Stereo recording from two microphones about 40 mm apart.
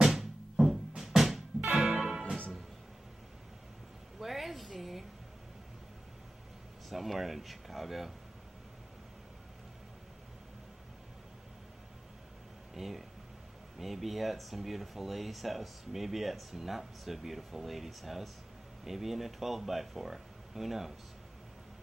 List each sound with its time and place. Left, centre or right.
0.0 s music: centre
1.7 s music: right
2.0 s music: right
4.2 s a sound: centre
6.9 s speech: centre
12.7 s speech: centre